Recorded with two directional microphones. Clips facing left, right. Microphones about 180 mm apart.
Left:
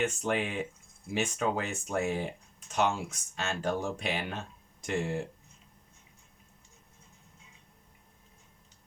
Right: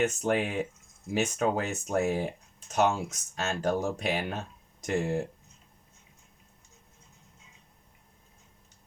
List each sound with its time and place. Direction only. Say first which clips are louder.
0.0 s speech: right 3 dB; 40° right (ahead or behind)